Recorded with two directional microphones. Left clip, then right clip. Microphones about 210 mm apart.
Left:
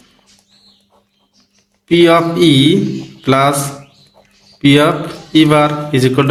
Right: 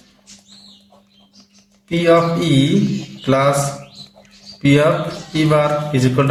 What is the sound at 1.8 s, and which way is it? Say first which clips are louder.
A man's voice: left 4 dB; 40° left (ahead or behind).